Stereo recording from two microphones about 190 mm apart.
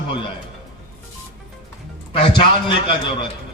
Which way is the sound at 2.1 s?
25° left (ahead or behind).